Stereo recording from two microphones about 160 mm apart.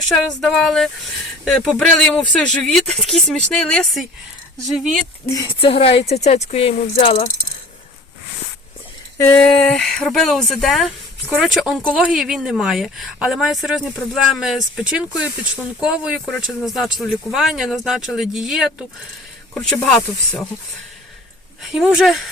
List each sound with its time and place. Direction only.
0.1 s speech: centre (ahead or behind)
5.2 s speech: 20° left (ahead or behind)
5.5 s speech: 35° left (ahead or behind)
9.4 s speech: 5° left (ahead or behind)
21.6 s speech: centre (ahead or behind)